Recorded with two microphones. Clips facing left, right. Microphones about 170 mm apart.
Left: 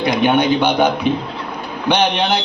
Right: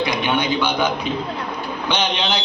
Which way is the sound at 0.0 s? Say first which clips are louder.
Left 6 dB; 55° left (ahead or behind).